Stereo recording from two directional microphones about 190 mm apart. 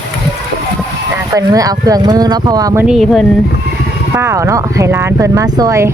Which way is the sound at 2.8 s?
Centre (ahead or behind).